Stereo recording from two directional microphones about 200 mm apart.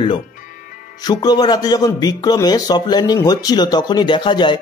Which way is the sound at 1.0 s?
20° left (ahead or behind).